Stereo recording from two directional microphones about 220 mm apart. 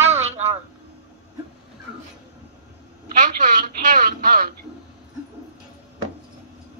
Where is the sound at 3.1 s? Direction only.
35° right (ahead or behind).